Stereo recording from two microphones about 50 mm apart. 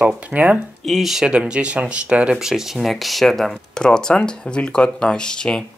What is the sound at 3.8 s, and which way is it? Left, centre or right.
Speech, centre.